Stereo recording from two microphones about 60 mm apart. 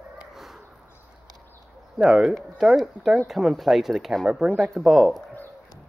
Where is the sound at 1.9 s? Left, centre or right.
Centre.